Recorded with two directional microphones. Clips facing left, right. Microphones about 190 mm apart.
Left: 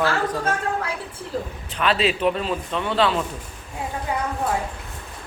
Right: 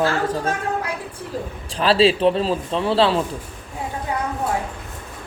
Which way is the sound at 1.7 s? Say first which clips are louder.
Right 5 dB; 30° right (ahead or behind).